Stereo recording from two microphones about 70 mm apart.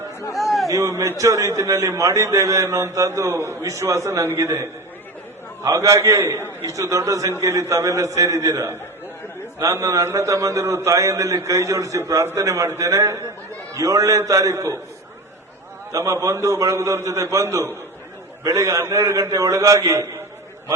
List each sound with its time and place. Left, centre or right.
0.3 s a sound: centre
0.7 s a man's voice: right
3.1 s a man's voice: right
5.6 s a man's voice: right
15.9 s a man's voice: right
18.4 s a man's voice: right